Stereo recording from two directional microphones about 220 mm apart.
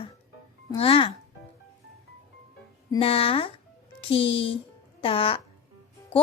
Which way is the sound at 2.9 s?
25° left (ahead or behind).